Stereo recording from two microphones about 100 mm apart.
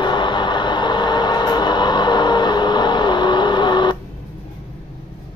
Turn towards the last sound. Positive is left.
turn(degrees=50)  # may be behind; listen again after turning